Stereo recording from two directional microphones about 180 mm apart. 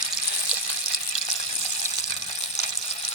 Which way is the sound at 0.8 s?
40° left (ahead or behind).